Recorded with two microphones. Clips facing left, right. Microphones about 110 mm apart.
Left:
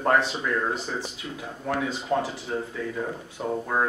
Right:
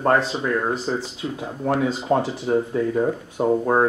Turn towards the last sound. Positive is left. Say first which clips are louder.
# right 8 dB
turn(degrees=-45)  # may be behind; listen again after turning